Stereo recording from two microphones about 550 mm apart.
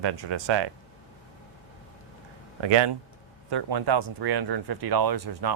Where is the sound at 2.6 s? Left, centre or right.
Right.